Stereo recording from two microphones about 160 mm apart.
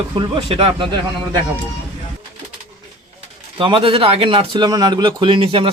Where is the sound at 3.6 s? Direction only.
30° right (ahead or behind).